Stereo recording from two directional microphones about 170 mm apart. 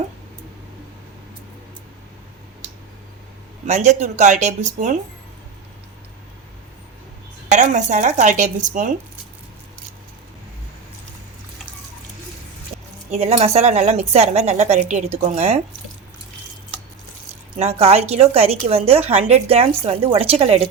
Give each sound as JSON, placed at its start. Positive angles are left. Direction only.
{"t": 3.7, "sound": "speech", "side_deg": -40}
{"t": 7.5, "sound": "speech", "side_deg": -45}
{"t": 13.1, "sound": "a woman's voice", "side_deg": -40}
{"t": 17.6, "sound": "a woman's voice", "side_deg": -40}